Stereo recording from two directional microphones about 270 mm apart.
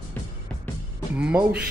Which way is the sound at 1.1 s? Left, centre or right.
Centre.